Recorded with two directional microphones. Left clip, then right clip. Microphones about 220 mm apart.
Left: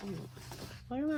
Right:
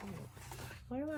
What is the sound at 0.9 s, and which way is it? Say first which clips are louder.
Speech: left 4 dB; 25° left (ahead or behind).